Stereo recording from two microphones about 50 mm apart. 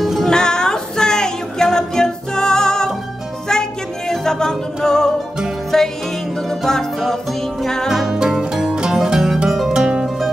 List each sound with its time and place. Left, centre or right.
0.0 s music: centre
0.3 s music: centre
4.1 s music: centre
7.6 s music: centre
7.9 s music: centre